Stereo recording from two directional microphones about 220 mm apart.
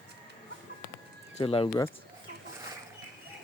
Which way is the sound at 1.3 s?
25° left (ahead or behind).